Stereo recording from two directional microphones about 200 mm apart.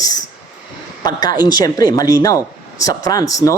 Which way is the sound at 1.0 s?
20° left (ahead or behind).